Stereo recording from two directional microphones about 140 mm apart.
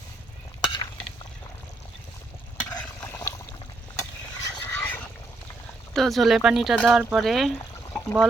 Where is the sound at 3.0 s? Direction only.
15° left (ahead or behind).